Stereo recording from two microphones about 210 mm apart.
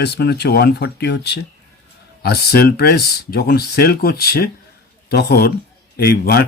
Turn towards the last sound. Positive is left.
turn(degrees=50)  # may be behind; listen again after turning